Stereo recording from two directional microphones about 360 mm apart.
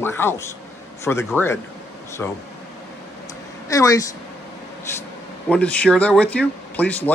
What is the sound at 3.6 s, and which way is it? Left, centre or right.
Speech, centre.